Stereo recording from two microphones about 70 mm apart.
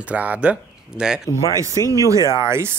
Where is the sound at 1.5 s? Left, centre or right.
Right.